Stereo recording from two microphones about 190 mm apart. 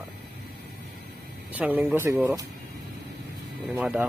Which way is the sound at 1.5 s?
10° right (ahead or behind).